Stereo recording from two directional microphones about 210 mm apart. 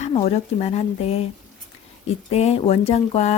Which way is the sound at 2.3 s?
30° left (ahead or behind).